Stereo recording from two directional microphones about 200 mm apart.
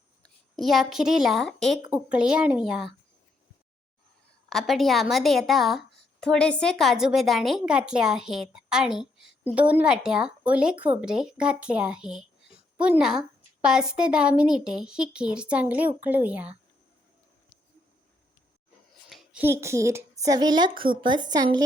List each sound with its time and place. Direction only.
0.2 s a woman's voice: centre (ahead or behind)
4.4 s a woman's voice: centre (ahead or behind)
19.0 s a woman's voice: 5° right (ahead or behind); by 21.6 s 20° right (ahead or behind)